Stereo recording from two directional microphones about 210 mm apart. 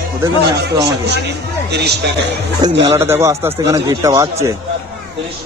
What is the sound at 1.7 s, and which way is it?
Speech, 50° right (ahead or behind).